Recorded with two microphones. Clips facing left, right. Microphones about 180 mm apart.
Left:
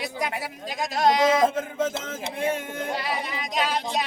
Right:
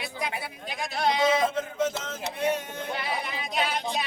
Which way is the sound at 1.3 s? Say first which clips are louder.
Left 4 dB; 50° left (ahead or behind).